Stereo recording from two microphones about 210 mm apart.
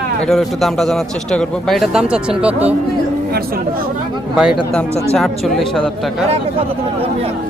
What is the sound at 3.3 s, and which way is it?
Speech, 45° right (ahead or behind).